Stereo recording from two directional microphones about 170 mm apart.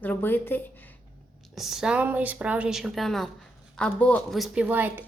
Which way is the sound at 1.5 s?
Centre (ahead or behind).